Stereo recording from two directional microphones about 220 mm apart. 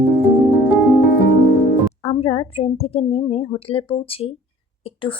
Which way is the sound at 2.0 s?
30° left (ahead or behind).